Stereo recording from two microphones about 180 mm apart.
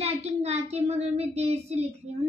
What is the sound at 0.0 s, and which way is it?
Child singing, 35° right (ahead or behind).